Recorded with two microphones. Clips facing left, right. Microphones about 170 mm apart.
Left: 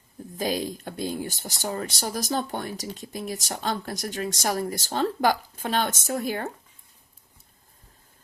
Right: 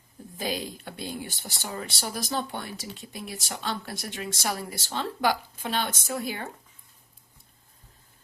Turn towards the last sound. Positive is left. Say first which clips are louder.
# left 4 dB
turn(degrees=45)  # may be behind; listen again after turning